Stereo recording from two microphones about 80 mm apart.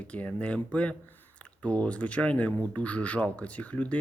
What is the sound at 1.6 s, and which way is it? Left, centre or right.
Speech, centre.